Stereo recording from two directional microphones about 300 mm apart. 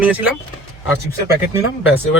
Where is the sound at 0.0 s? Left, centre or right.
Centre.